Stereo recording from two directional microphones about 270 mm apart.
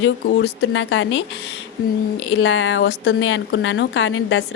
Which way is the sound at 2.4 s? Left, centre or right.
Left.